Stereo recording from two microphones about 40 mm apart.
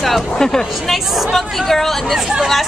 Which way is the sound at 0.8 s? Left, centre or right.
Centre.